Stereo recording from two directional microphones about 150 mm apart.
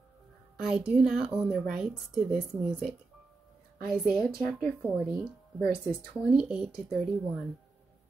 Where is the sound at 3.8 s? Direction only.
5° right (ahead or behind).